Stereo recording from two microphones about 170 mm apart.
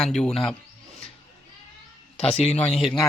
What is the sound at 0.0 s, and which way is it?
Speech, 5° left (ahead or behind).